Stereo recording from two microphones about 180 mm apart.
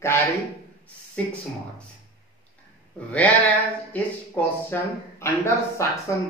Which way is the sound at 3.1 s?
10° left (ahead or behind).